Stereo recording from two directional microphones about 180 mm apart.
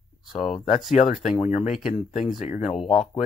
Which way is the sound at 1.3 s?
35° left (ahead or behind).